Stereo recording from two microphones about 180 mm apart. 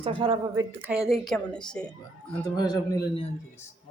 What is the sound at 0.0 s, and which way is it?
Speech, 30° right (ahead or behind).